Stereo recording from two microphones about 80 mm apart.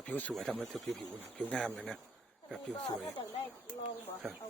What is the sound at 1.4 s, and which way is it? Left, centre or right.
Speech, centre.